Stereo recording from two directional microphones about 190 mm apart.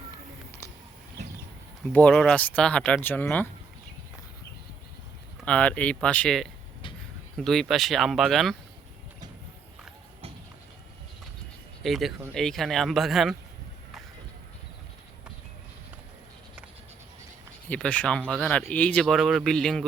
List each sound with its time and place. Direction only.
0.6 s a sound: 15° left (ahead or behind)
1.9 s speech: 5° left (ahead or behind)
5.4 s speech: 5° left (ahead or behind)
11.8 s speech: centre (ahead or behind)
17.7 s speech: 5° left (ahead or behind)